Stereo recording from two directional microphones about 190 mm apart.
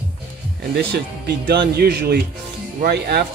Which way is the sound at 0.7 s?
60° right (ahead or behind).